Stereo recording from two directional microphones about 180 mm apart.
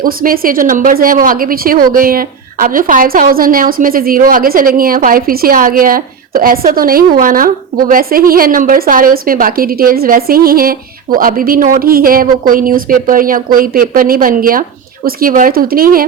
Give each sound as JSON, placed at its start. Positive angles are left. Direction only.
{"t": 0.0, "sound": "speech", "side_deg": -50}